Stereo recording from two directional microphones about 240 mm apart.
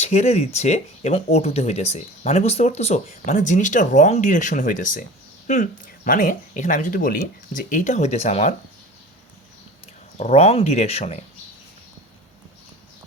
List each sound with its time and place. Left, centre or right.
0.0 s speech: left
6.1 s speech: left
9.8 s speech: left